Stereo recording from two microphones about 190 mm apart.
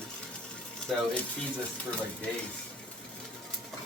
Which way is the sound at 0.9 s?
Centre (ahead or behind).